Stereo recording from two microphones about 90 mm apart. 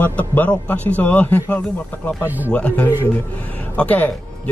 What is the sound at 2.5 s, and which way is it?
Speech, 15° left (ahead or behind).